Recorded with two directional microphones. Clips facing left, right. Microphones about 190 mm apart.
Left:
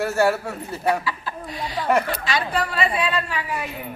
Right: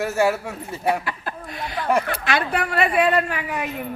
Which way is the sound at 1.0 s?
55° right (ahead or behind).